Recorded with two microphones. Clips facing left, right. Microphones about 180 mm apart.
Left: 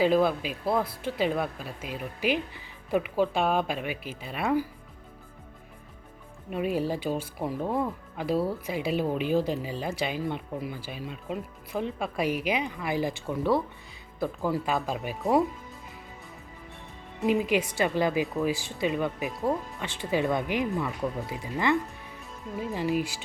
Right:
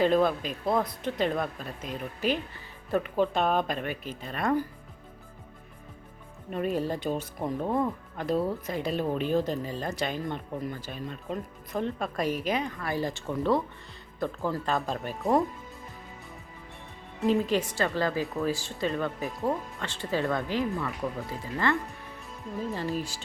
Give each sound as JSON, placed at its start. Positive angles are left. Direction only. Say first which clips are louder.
{"t": 0.0, "sound": "speech", "louder": "left 1 dB", "side_deg": 5}
{"t": 6.5, "sound": "speech", "louder": "left 1 dB", "side_deg": 10}
{"t": 17.4, "sound": "speech", "louder": "left 1 dB", "side_deg": 10}